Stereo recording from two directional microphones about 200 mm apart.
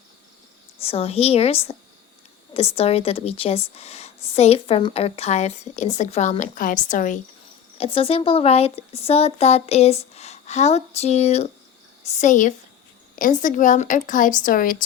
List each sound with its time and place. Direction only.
0.8 s a woman's voice: 30° left (ahead or behind)
7.8 s speech: 30° left (ahead or behind); by 14.8 s 45° left (ahead or behind)